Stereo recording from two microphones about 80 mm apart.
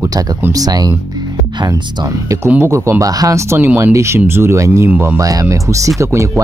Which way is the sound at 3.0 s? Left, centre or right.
Right.